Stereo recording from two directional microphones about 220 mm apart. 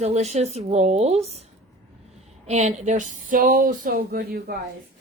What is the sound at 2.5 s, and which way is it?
Speech, 30° right (ahead or behind).